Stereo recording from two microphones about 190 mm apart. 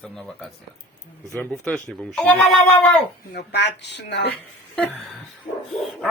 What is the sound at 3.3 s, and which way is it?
Speech, 65° left (ahead or behind).